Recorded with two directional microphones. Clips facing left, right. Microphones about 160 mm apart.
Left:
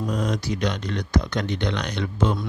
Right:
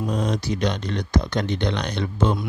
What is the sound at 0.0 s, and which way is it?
Speech, 25° right (ahead or behind).